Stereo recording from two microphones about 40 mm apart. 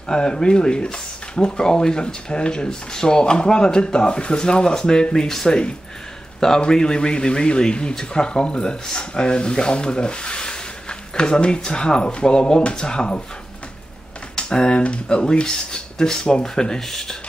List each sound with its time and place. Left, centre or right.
0.1 s speech: centre
14.3 s typing: centre
14.8 s speech: left